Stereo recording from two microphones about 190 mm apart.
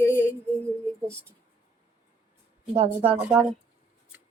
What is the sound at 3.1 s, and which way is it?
Speech, 5° right (ahead or behind).